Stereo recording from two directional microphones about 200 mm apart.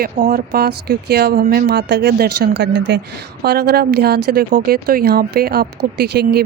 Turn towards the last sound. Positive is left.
turn(degrees=-55)  # may be behind; listen again after turning